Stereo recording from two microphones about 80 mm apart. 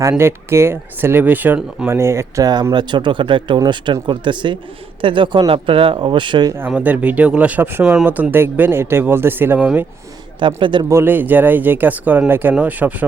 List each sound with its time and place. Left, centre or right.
0.1 s speech: right
1.9 s speech: right
2.4 s speech: right
2.7 s speech: right
6.7 s speech: centre
10.4 s speech: right
11.0 s speech: right